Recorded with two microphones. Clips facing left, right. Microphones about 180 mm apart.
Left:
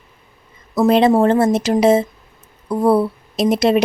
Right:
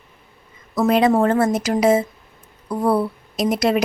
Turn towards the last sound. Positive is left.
turn(degrees=25)  # may be behind; listen again after turning